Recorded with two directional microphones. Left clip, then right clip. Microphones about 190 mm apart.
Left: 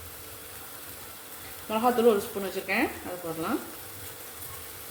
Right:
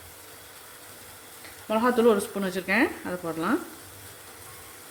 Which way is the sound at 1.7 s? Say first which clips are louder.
Right 1 dB; 60° right (ahead or behind).